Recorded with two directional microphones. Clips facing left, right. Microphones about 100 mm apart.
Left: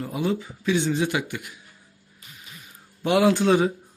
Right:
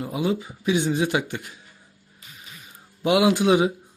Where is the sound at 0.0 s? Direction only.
15° right (ahead or behind).